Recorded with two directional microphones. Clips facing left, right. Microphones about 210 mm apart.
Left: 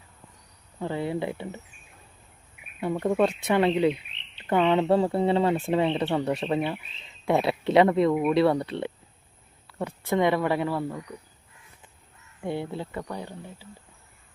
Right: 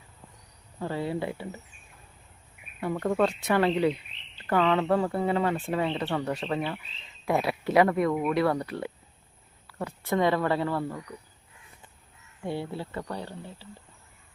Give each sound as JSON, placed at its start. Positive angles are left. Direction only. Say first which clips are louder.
{"t": 0.8, "sound": "speech", "louder": "left 2 dB", "side_deg": 20}
{"t": 2.8, "sound": "speech", "louder": "left 2 dB", "side_deg": 20}
{"t": 12.5, "sound": "speech", "louder": "left 2 dB", "side_deg": 20}